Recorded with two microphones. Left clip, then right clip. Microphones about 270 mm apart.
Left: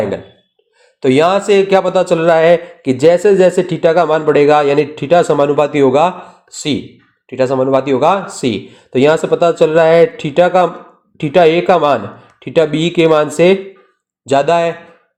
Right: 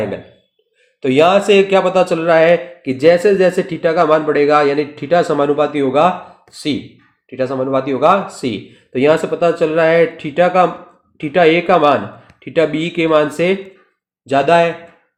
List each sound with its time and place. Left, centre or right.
1.0 s a man's voice: left
7.3 s a man's voice: centre